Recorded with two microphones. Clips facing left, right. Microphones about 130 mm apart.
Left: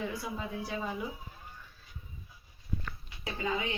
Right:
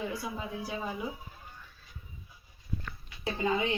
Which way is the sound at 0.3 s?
5° right (ahead or behind).